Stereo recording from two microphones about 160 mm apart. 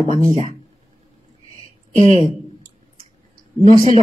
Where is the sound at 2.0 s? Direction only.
50° right (ahead or behind).